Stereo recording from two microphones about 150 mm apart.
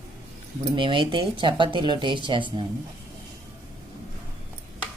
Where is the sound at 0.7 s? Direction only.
35° right (ahead or behind).